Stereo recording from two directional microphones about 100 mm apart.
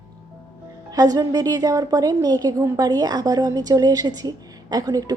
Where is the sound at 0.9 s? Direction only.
40° right (ahead or behind).